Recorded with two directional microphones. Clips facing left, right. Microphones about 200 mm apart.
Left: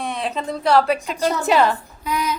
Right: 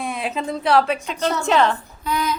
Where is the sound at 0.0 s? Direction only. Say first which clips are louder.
Even; 5° right (ahead or behind).